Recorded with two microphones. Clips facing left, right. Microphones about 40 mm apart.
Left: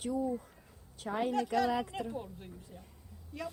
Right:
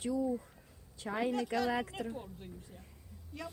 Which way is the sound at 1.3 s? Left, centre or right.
Centre.